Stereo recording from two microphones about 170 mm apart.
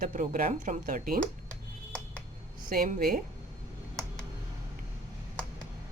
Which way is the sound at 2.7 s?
55° right (ahead or behind).